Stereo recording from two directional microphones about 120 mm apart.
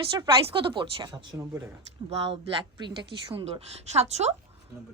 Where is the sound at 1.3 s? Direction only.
30° right (ahead or behind).